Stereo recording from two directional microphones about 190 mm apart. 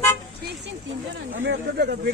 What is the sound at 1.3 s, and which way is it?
Speech, 70° right (ahead or behind).